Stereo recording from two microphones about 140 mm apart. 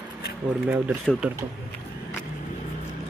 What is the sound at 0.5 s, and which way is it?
Speech, 10° right (ahead or behind).